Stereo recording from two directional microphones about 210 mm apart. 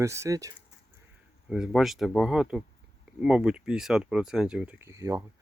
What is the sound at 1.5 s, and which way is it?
Speech, centre (ahead or behind).